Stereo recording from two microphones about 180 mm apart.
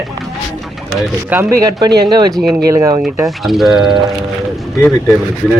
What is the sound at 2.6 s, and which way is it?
Speech, 20° right (ahead or behind).